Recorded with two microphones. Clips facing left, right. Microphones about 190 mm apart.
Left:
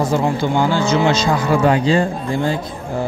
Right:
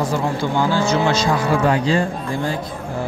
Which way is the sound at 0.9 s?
20° left (ahead or behind).